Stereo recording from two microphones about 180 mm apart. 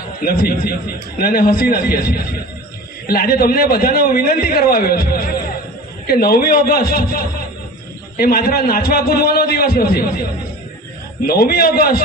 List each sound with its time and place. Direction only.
0.2 s a man's voice: 55° left (ahead or behind)
11.3 s a man's voice: 60° left (ahead or behind)